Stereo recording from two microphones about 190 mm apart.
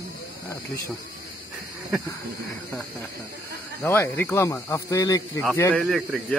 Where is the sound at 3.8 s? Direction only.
10° left (ahead or behind).